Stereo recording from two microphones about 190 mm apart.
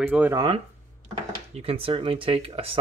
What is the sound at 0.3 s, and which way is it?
Speech, 25° right (ahead or behind).